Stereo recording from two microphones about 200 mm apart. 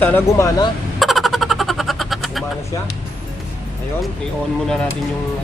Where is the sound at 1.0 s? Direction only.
Centre (ahead or behind).